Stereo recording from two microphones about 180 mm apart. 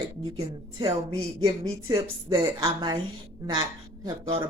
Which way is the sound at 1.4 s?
20° right (ahead or behind).